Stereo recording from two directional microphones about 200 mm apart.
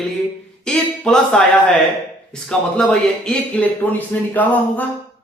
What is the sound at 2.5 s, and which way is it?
Speech, 5° left (ahead or behind).